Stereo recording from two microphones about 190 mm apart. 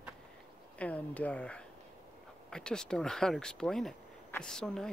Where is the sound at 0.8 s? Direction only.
5° left (ahead or behind).